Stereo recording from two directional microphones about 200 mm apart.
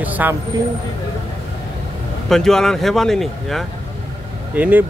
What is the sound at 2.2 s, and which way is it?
Speech, centre (ahead or behind).